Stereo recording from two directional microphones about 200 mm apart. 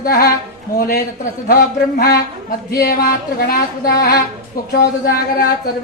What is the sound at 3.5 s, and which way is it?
Speech, 50° left (ahead or behind).